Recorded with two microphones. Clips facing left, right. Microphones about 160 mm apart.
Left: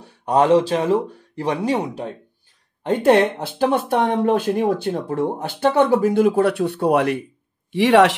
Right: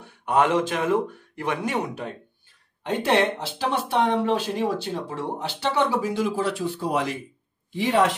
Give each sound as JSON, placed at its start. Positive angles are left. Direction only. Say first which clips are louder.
{"t": 0.0, "sound": "speech", "louder": "left 4 dB", "side_deg": 35}
{"t": 2.9, "sound": "speech", "louder": "left 6 dB", "side_deg": 50}
{"t": 7.7, "sound": "speech", "louder": "left 7 dB", "side_deg": 80}